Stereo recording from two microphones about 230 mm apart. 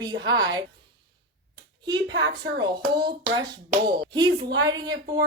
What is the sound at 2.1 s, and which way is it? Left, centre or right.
Speech, right.